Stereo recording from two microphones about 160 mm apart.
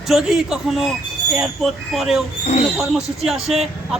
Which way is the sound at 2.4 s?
40° left (ahead or behind).